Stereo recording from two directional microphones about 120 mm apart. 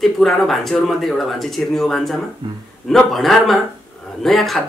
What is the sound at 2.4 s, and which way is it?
Speech, 40° right (ahead or behind).